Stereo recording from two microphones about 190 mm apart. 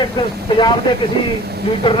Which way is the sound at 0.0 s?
25° left (ahead or behind).